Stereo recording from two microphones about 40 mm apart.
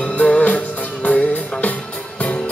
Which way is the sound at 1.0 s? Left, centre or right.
Left.